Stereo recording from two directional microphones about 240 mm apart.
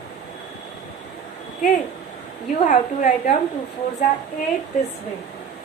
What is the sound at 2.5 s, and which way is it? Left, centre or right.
Speech, left.